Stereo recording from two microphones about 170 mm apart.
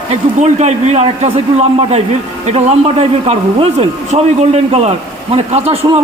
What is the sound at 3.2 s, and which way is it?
A man's voice, 40° right (ahead or behind).